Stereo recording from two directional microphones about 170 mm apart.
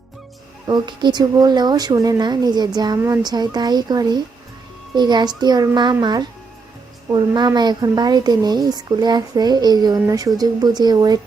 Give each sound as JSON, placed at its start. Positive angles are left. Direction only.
{"t": 0.7, "sound": "speech", "side_deg": -25}